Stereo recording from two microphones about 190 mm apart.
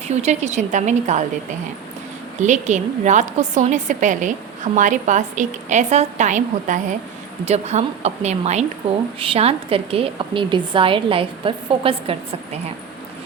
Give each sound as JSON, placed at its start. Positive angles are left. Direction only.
{"t": 0.1, "sound": "a woman's voice", "side_deg": -35}
{"t": 2.4, "sound": "a woman's voice", "side_deg": -40}